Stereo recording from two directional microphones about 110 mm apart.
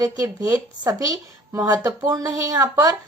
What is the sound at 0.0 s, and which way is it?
A woman's voice, 30° right (ahead or behind).